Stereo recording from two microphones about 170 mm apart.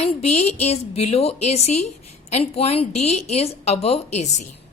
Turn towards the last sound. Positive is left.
turn(degrees=40)  # may be behind; listen again after turning